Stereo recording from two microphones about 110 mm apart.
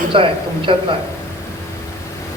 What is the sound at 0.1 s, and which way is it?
Speech, 55° right (ahead or behind).